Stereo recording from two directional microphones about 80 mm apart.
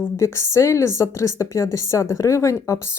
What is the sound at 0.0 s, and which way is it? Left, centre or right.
A woman's voice, left.